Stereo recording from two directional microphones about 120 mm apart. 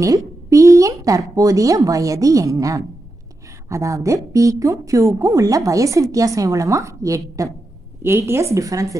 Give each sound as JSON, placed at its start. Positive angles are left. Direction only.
{"t": 0.0, "sound": "speech", "side_deg": -25}